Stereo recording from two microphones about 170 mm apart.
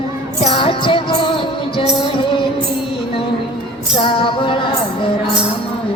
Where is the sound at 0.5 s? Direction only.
30° left (ahead or behind).